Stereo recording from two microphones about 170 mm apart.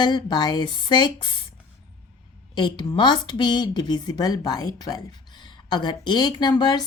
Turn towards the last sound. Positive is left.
turn(degrees=25)  # may be behind; listen again after turning